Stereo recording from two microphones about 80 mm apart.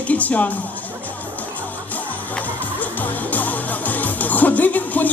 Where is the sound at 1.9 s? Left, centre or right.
Left.